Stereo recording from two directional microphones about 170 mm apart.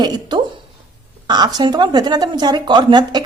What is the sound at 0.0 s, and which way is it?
A woman's voice, 25° right (ahead or behind).